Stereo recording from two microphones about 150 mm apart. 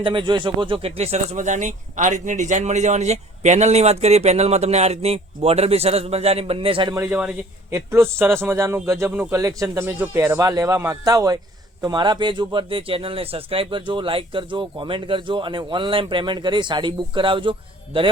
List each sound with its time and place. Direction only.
0.0 s speech: 30° right (ahead or behind)
6.9 s a man's voice: 15° right (ahead or behind); by 18.1 s 35° right (ahead or behind)